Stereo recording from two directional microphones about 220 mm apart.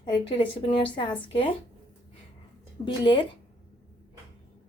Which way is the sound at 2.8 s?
20° left (ahead or behind).